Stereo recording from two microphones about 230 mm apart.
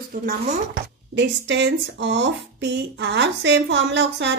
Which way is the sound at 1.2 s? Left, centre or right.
Right.